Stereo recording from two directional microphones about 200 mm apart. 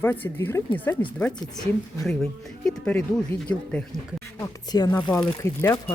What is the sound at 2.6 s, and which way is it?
Speech, 5° left (ahead or behind).